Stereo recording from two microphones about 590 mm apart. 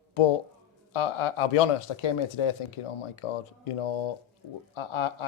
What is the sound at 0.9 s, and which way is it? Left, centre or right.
Speech, left.